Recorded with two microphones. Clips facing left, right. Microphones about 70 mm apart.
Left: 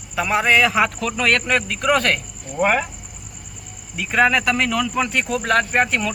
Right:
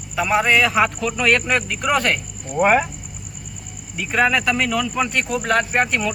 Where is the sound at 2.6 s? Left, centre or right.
Centre.